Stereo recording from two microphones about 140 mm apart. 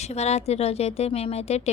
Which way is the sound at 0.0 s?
50° left (ahead or behind).